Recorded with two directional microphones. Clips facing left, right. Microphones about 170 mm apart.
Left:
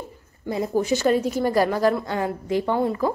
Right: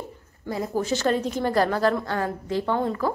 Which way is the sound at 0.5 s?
20° left (ahead or behind).